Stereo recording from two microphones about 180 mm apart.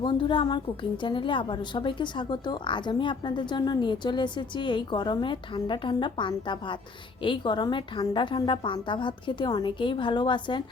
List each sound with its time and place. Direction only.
0.0 s speech: 25° left (ahead or behind)